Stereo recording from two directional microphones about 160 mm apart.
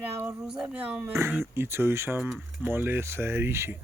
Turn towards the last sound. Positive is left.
turn(degrees=-15)  # may be behind; listen again after turning